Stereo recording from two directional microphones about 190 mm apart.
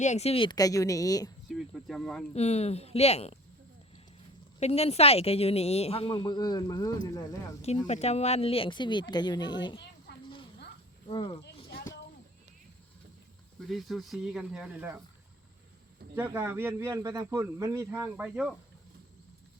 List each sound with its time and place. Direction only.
0.0 s speech: 35° left (ahead or behind); by 1.3 s 20° left (ahead or behind)
1.5 s cricket: centre (ahead or behind)
2.3 s a woman's voice: 35° left (ahead or behind)
4.6 s a woman's voice: 35° left (ahead or behind)
7.9 s speech: 35° left (ahead or behind)
10.1 s a sound: 60° left (ahead or behind)
11.1 s speech: 25° left (ahead or behind)
11.4 s a sound: 55° left (ahead or behind)
13.6 s speech: centre (ahead or behind)
16.1 s speech: 10° right (ahead or behind)